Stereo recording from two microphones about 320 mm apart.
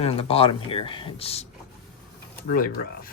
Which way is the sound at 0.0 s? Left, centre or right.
Centre.